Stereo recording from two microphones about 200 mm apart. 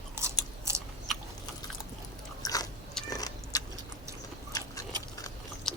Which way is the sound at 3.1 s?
20° left (ahead or behind).